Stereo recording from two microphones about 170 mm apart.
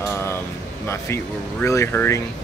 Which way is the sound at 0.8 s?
15° left (ahead or behind).